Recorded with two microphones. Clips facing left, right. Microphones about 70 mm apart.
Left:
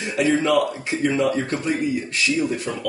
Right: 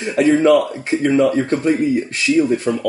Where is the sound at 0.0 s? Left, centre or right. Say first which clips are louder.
Right 7 dB; right.